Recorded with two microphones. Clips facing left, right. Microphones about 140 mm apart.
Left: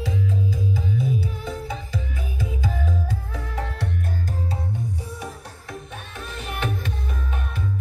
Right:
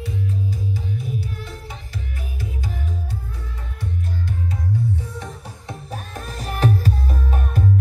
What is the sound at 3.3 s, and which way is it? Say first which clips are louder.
Music: left 7 dB; 90° left.